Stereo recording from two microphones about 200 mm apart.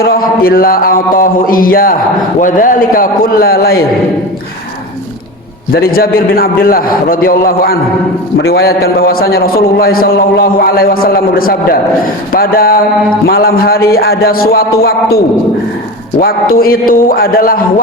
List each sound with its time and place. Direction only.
0.0 s a man's voice: 50° left (ahead or behind)
5.7 s a man's voice: 50° left (ahead or behind)
16.2 s a man's voice: 45° left (ahead or behind)